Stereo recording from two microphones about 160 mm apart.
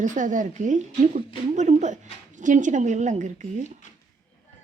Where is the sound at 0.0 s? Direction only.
50° right (ahead or behind).